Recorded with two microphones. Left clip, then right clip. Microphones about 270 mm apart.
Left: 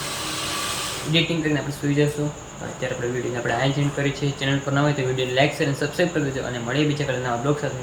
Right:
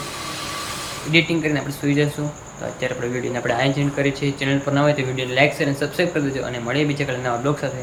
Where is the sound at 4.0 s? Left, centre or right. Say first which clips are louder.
Right 4 dB; centre.